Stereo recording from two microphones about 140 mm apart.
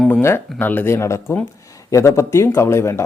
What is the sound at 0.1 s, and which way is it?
Speech, 15° left (ahead or behind).